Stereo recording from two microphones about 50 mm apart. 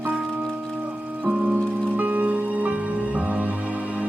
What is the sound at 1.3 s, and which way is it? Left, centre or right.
Music, right.